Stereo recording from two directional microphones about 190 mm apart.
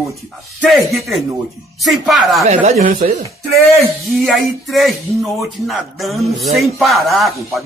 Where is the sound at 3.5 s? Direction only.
Centre (ahead or behind).